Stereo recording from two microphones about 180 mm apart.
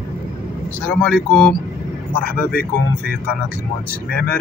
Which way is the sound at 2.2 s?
55° left (ahead or behind).